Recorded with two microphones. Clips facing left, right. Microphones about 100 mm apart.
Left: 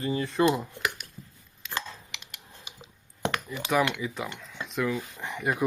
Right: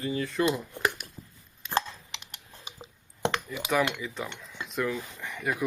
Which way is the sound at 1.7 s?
35° right (ahead or behind).